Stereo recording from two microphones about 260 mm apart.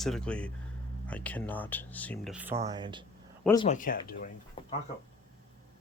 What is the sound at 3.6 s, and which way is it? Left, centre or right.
Speech, left.